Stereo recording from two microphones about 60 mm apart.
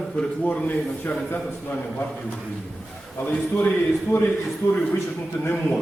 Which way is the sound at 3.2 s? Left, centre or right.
Left.